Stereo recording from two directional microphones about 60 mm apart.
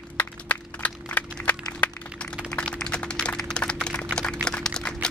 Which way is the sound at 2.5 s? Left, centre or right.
Centre.